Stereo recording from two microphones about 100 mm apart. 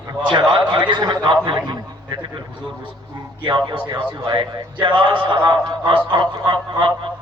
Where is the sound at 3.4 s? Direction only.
55° right (ahead or behind).